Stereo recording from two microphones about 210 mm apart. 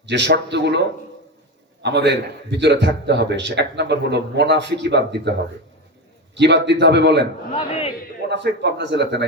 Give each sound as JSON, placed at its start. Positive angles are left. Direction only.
{"t": 0.0, "sound": "a man's voice", "side_deg": -55}
{"t": 6.3, "sound": "a man's voice", "side_deg": -55}
{"t": 7.5, "sound": "speech", "side_deg": 30}
{"t": 8.3, "sound": "a man's voice", "side_deg": -55}